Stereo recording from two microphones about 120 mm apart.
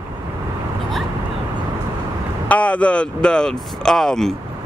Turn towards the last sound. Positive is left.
turn(degrees=5)  # may be behind; listen again after turning